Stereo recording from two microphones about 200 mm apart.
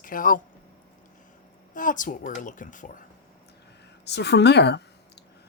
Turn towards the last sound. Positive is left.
turn(degrees=55)  # may be behind; listen again after turning